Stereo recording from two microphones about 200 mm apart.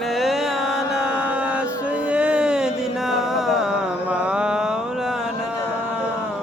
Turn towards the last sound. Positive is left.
turn(degrees=-5)  # may be behind; listen again after turning